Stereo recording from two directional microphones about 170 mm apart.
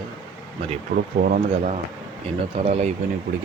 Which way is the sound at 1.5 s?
40° right (ahead or behind).